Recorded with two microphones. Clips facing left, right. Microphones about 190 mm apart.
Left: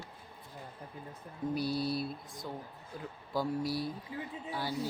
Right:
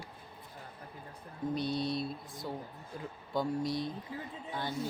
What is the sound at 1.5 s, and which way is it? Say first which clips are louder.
Speech: even; 5° left (ahead or behind).